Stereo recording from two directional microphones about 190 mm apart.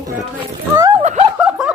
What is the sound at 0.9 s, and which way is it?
Snicker, 35° right (ahead or behind).